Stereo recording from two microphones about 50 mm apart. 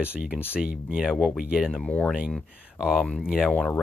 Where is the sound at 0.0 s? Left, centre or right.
Right.